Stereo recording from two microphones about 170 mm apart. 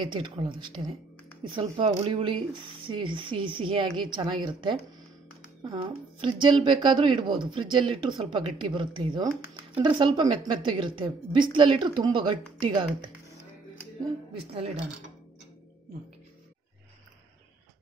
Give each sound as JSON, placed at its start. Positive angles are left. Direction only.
{"t": 0.0, "sound": "speech", "side_deg": -25}